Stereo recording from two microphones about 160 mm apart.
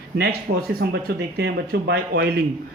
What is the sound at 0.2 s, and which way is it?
Speech, 85° right.